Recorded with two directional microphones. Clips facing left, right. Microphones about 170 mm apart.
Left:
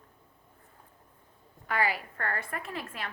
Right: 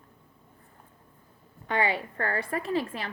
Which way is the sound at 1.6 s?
30° right (ahead or behind).